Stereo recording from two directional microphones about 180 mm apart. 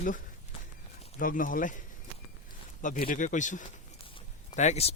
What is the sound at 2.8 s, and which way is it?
Speech, 50° left (ahead or behind).